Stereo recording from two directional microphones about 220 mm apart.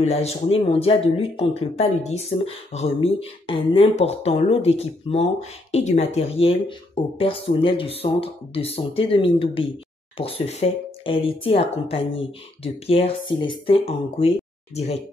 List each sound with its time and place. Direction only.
0.0 s speech: 30° left (ahead or behind)